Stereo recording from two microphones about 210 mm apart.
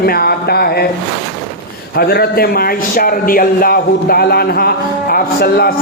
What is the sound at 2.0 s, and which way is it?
A man's voice, 50° left (ahead or behind).